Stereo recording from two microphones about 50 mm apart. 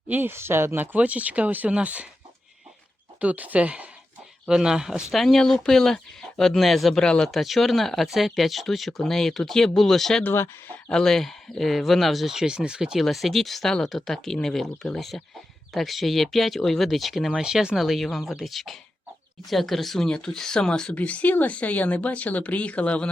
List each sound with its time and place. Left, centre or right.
0.1 s speech: right
0.3 s speech: right
0.9 s speech: right
3.2 s speech: right
4.4 s speech: centre
5.1 s speech: centre
7.0 s speech: centre
7.3 s speech: centre
13.0 s speech: centre
17.4 s speech: centre
17.7 s speech: centre
20.9 s speech: left